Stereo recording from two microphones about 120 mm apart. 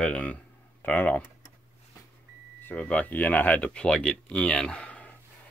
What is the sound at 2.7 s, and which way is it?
Speech, 10° left (ahead or behind).